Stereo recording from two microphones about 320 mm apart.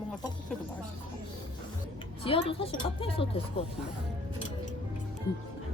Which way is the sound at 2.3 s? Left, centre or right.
Centre.